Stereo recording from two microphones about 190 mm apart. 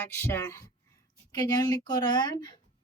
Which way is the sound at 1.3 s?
20° left (ahead or behind).